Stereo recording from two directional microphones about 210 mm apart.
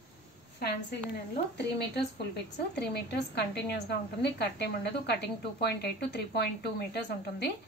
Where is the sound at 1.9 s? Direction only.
55° left (ahead or behind).